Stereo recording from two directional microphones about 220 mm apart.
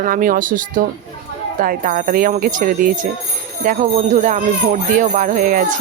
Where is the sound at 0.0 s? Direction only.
40° right (ahead or behind).